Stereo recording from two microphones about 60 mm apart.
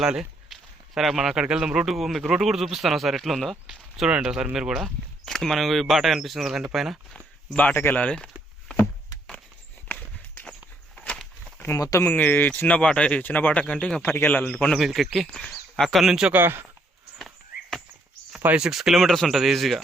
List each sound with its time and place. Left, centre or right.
0.0 s speech: centre
7.5 s speech: left
9.9 s walk: left
10.9 s a sound: centre
12.0 s speech: left; by 13.2 s centre
13.2 s speech: left
14.0 s speech: left
14.7 s speech: centre
15.3 s speech: centre
16.3 s speech: right
17.2 s a sound: centre
18.5 s speech: centre